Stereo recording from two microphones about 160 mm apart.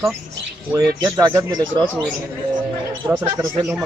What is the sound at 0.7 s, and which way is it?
Speech, 20° right (ahead or behind).